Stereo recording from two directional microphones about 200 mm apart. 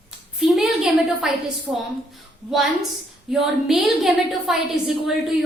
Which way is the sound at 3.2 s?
Centre (ahead or behind).